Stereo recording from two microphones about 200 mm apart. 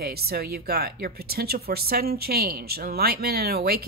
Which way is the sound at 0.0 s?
50° right (ahead or behind).